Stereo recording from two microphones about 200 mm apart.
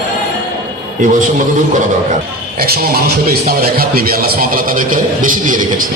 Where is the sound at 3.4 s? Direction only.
50° right (ahead or behind).